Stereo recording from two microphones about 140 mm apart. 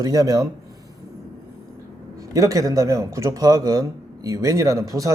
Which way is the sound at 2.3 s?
25° right (ahead or behind).